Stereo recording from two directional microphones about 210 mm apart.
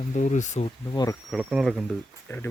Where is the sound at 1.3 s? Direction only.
Centre (ahead or behind).